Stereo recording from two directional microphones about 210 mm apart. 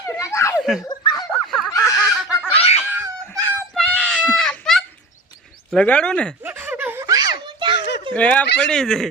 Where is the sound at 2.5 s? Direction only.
30° left (ahead or behind).